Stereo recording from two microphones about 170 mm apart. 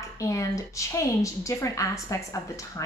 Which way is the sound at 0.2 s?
20° left (ahead or behind).